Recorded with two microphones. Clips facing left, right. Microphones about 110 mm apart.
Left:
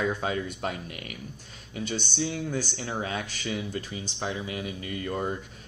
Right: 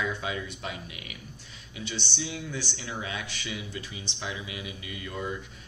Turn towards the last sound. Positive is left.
turn(degrees=45)  # may be behind; listen again after turning